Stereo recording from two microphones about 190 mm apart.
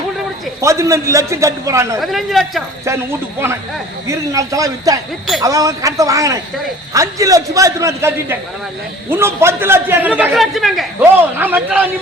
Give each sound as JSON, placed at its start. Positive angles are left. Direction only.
{"t": 0.6, "sound": "a man's voice", "side_deg": -15}
{"t": 2.0, "sound": "speech", "side_deg": 0}
{"t": 2.8, "sound": "a man's voice", "side_deg": -15}
{"t": 11.3, "sound": "a man's voice", "side_deg": -10}